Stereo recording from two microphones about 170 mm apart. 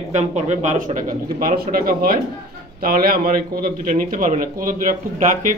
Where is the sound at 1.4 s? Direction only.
55° right (ahead or behind).